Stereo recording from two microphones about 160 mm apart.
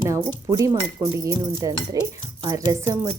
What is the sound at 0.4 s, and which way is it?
Speech, 20° right (ahead or behind).